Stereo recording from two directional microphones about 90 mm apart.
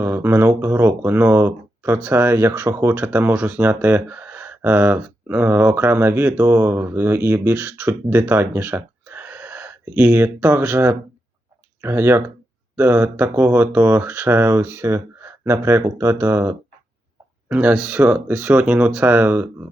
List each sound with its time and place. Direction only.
0.0 s speech: 25° right (ahead or behind)